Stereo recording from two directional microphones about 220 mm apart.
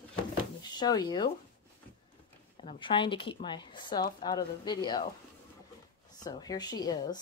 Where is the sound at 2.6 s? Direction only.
25° left (ahead or behind).